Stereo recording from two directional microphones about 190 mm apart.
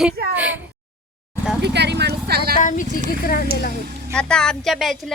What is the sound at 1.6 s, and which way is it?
Speech, 65° right (ahead or behind).